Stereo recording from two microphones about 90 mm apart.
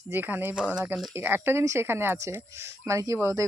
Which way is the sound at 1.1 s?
25° right (ahead or behind).